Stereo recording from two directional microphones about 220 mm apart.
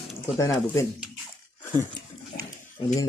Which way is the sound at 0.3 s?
15° left (ahead or behind).